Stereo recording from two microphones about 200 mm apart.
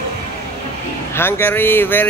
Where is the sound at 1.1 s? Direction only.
10° left (ahead or behind).